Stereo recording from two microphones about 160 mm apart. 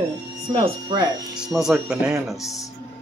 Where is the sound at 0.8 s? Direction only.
25° right (ahead or behind).